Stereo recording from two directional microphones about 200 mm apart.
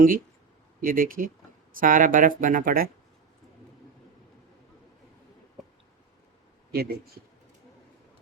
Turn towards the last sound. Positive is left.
turn(degrees=-50)  # may be behind; listen again after turning